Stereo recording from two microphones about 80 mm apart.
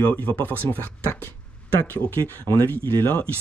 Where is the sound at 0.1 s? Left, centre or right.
Left.